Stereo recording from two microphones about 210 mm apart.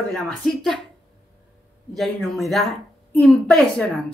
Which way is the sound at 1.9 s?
Centre (ahead or behind).